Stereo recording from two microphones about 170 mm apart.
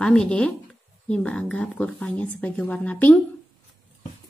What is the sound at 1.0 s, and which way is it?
A woman's voice, 5° left (ahead or behind).